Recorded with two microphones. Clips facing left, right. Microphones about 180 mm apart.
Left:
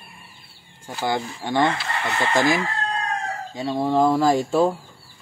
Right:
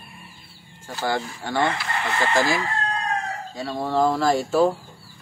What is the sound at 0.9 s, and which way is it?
Speech, 20° left (ahead or behind).